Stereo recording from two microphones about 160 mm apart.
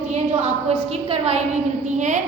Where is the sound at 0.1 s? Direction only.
40° right (ahead or behind).